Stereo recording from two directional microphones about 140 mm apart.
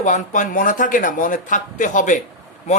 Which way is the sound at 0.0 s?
60° left (ahead or behind).